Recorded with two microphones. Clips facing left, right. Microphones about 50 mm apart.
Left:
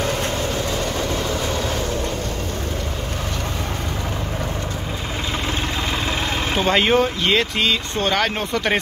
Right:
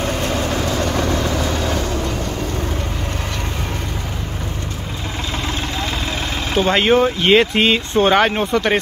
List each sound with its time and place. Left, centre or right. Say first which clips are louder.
6.5 s speech: right 3 dB; centre
7.2 s speech: right 6 dB; right; by 8.7 s centre